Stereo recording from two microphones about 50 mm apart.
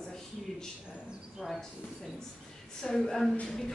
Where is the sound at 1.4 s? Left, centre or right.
Centre.